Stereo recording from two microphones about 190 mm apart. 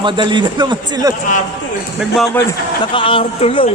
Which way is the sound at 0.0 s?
25° right (ahead or behind).